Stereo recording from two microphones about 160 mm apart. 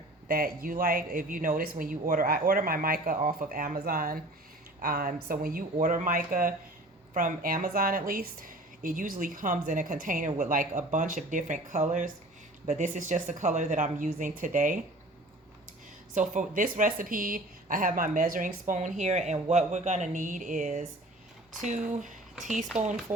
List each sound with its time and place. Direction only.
0.3 s speech: 65° right (ahead or behind)
16.1 s speech: 50° right (ahead or behind)